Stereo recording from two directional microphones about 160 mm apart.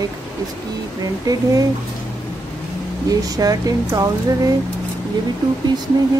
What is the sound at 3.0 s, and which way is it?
Speech, 25° right (ahead or behind).